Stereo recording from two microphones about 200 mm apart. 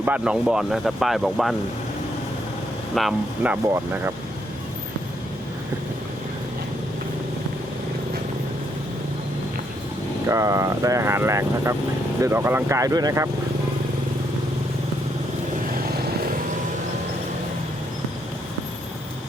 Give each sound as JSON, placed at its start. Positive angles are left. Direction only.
{"t": 0.0, "sound": "speech", "side_deg": -5}
{"t": 2.9, "sound": "speech", "side_deg": 0}
{"t": 10.2, "sound": "speech", "side_deg": -15}
{"t": 15.8, "sound": "vehicle", "side_deg": -50}